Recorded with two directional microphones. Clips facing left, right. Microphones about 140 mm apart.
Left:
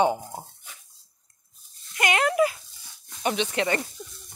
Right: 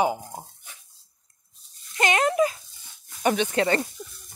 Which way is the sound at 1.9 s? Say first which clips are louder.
Right 1 dB; 25° right (ahead or behind).